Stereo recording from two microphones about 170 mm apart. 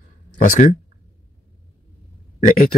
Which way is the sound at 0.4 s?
50° left (ahead or behind).